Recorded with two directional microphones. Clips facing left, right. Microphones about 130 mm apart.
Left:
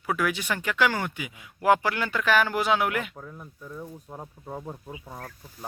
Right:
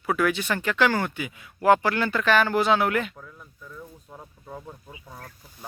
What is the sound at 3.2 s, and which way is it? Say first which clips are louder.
Speech: left 4 dB; 30° left (ahead or behind).